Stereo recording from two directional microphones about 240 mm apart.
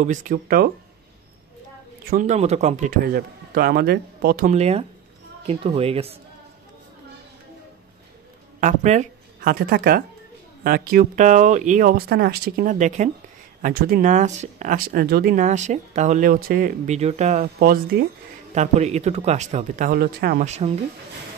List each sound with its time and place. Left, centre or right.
0.0 s speech: right
2.0 s speech: right
8.5 s speech: right
18.5 s speech: right